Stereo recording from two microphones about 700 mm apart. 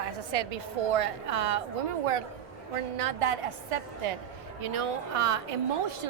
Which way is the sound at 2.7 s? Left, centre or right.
Right.